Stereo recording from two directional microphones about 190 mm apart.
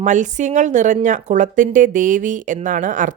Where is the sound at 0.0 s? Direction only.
40° right (ahead or behind).